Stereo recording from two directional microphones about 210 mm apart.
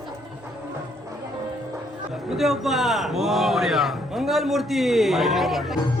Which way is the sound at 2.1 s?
Centre (ahead or behind).